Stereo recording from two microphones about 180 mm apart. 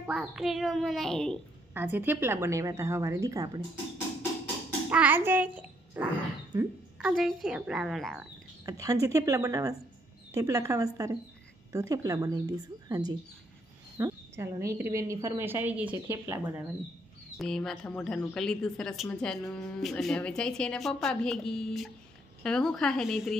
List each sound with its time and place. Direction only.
0.0 s speech: 5° right (ahead or behind)
1.7 s a woman's voice: 10° right (ahead or behind)
4.8 s a child's voice: 10° right (ahead or behind)
8.6 s a woman's voice: 20° right (ahead or behind)
17.4 s speech: centre (ahead or behind)